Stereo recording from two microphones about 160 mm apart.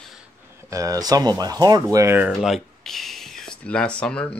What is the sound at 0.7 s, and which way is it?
Speech, 20° right (ahead or behind).